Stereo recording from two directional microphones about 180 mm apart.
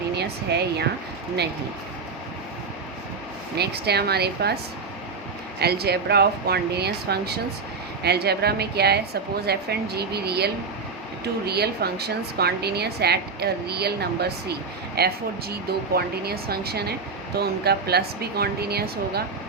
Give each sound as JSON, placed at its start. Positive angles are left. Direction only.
{"t": 0.2, "sound": "speech", "side_deg": -65}
{"t": 3.6, "sound": "a woman's voice", "side_deg": -65}
{"t": 5.5, "sound": "a woman's voice", "side_deg": -65}